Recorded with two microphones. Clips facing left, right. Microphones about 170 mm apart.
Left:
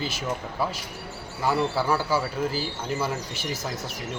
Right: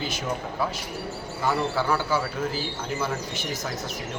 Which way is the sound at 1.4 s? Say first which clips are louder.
Left 1 dB; 5° left (ahead or behind).